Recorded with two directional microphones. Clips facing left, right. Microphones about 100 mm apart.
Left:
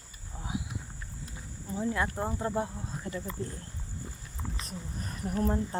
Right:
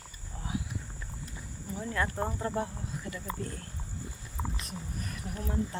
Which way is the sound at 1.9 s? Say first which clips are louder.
Even; 15° left (ahead or behind).